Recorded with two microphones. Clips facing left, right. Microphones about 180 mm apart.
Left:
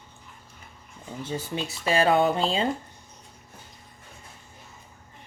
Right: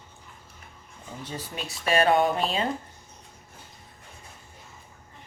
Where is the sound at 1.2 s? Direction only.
25° left (ahead or behind).